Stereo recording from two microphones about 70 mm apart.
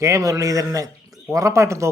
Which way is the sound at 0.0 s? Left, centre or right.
Right.